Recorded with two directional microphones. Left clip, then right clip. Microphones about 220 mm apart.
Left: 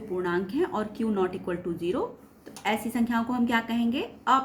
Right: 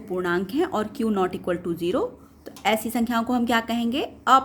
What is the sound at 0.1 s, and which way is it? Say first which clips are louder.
Speech: right 4 dB; 50° right (ahead or behind).